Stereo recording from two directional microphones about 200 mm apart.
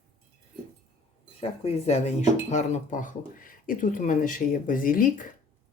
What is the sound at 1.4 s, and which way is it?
Speech, 30° left (ahead or behind).